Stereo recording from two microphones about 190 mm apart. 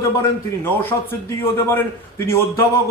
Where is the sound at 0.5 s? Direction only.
10° left (ahead or behind).